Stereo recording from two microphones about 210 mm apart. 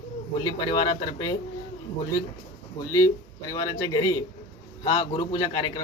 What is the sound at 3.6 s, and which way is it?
A man's voice, 15° left (ahead or behind).